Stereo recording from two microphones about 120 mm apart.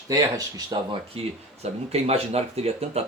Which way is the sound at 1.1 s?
55° right (ahead or behind).